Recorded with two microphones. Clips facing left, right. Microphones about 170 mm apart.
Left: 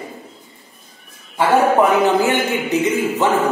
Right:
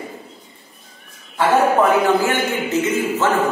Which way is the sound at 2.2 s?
15° left (ahead or behind).